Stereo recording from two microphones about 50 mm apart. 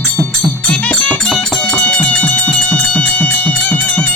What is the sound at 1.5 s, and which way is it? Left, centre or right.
Music, centre.